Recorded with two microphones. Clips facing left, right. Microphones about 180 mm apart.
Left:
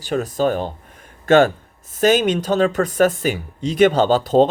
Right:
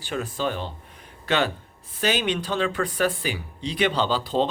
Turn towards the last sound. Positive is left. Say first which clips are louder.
# left 9 dB
turn(degrees=45)  # may be behind; listen again after turning